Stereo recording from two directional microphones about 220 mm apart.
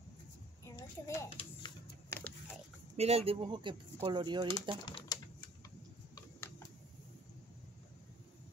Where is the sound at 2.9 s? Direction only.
30° right (ahead or behind).